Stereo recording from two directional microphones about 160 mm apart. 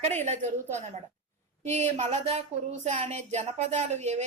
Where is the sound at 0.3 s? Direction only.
45° right (ahead or behind).